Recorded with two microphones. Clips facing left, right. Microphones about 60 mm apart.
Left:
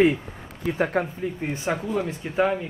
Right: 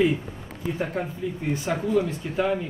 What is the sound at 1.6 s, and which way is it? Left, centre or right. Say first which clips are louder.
Speech: right 2 dB; left.